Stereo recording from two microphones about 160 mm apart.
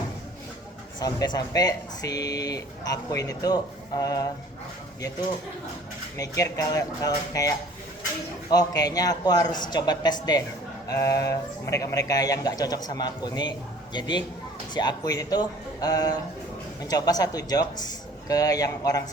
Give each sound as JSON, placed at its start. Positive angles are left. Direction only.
{"t": 0.9, "sound": "speech", "side_deg": 25}
{"t": 6.1, "sound": "speech", "side_deg": 20}